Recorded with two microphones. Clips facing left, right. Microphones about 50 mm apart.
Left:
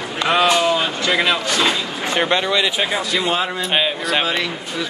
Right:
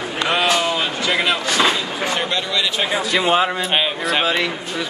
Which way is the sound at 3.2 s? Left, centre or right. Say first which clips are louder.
Right 3 dB; centre.